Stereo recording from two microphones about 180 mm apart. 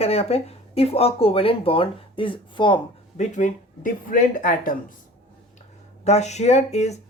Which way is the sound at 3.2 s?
45° left (ahead or behind).